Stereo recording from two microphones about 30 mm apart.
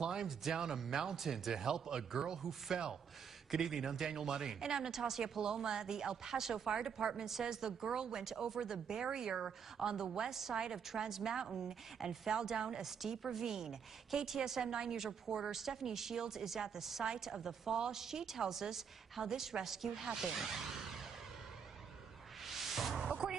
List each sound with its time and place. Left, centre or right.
0.0 s a sound: right
0.6 s a woman's voice: centre
12.3 s speech: right
12.8 s a woman's voice: centre
22.4 s music: centre
22.9 s music: centre